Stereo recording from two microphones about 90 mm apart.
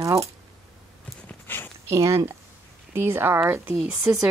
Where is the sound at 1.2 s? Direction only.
20° left (ahead or behind).